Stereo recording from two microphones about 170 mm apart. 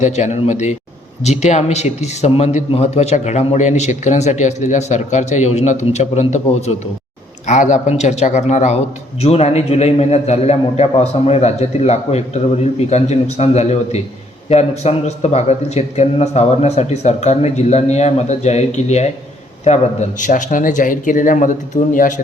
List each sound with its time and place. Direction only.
0.0 s a man's voice: 45° left (ahead or behind)